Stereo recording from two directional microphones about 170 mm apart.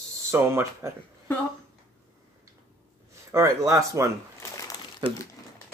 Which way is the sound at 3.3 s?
15° right (ahead or behind).